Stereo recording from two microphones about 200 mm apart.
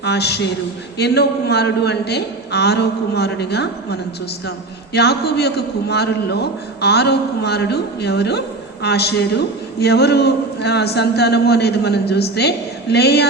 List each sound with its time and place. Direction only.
0.0 s a man's voice: 55° left (ahead or behind)
4.9 s a man's voice: 55° left (ahead or behind)